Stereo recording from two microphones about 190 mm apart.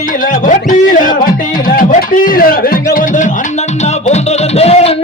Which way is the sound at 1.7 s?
45° left (ahead or behind).